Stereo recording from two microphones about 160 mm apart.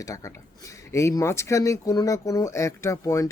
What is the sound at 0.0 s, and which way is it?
Speech, 20° left (ahead or behind).